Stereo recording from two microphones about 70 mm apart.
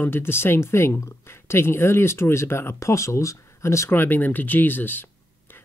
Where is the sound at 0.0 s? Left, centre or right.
Left.